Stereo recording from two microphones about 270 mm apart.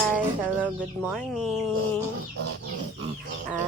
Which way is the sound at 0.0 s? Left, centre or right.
Centre.